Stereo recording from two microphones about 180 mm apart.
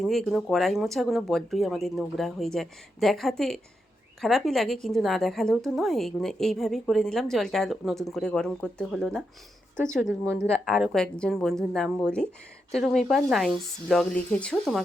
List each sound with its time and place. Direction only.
0.0 s a woman's voice: centre (ahead or behind)
10.7 s a woman's voice: centre (ahead or behind)